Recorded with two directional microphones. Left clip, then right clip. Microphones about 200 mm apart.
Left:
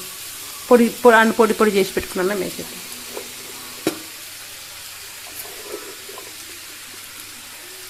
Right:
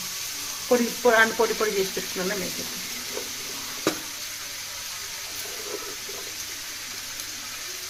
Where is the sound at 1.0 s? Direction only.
60° left (ahead or behind).